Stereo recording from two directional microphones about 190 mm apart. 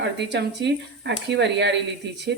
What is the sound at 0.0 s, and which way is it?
Speech, 65° right (ahead or behind).